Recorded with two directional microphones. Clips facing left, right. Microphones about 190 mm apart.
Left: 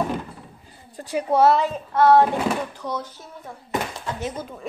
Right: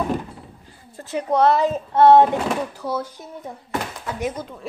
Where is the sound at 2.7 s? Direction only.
10° right (ahead or behind).